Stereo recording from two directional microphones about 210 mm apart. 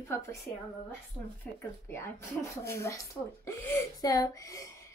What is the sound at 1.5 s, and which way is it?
A woman's voice, 5° left (ahead or behind).